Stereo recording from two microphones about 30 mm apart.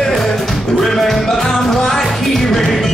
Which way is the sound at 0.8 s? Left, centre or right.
Centre.